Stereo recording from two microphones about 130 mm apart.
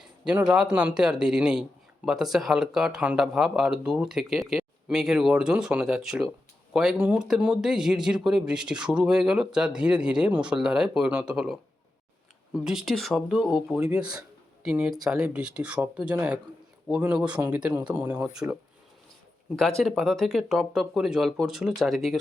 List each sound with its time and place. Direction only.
0.0 s speech: 10° right (ahead or behind)
19.5 s speech: 5° left (ahead or behind)